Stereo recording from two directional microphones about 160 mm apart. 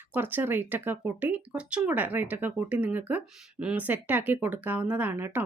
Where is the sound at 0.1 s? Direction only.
10° right (ahead or behind).